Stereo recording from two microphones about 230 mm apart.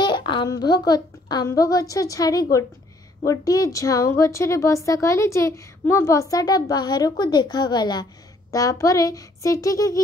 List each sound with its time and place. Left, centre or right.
0.0 s a woman's voice: centre